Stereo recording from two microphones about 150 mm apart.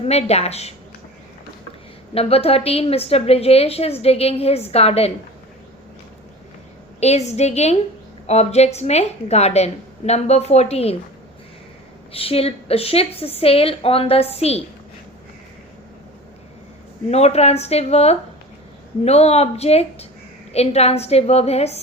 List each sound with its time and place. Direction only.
0.0 s a woman's voice: 45° left (ahead or behind)
2.1 s a woman's voice: 40° left (ahead or behind)
7.0 s a woman's voice: 45° left (ahead or behind)
12.1 s a woman's voice: 40° left (ahead or behind)
17.1 s a woman's voice: 45° left (ahead or behind)